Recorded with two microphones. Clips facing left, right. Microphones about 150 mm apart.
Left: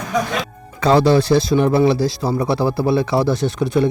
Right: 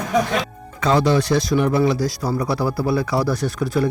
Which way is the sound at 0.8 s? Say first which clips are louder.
Left 4 dB; 35° left (ahead or behind).